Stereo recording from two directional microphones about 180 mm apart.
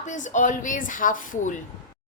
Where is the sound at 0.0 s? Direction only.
40° left (ahead or behind).